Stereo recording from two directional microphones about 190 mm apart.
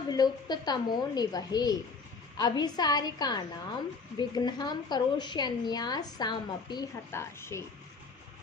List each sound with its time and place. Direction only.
0.1 s a woman's voice: 20° left (ahead or behind)